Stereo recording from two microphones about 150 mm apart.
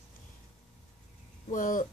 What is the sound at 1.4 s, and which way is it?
Speech, 65° left (ahead or behind).